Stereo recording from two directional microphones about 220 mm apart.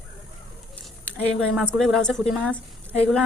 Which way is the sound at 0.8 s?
Centre (ahead or behind).